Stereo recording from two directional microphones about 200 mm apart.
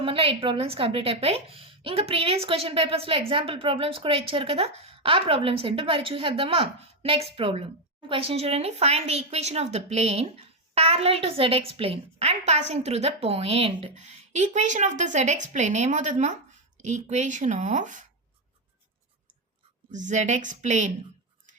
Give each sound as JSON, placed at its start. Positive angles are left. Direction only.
{"t": 0.0, "sound": "a woman's voice", "side_deg": -25}
{"t": 19.9, "sound": "speech", "side_deg": -40}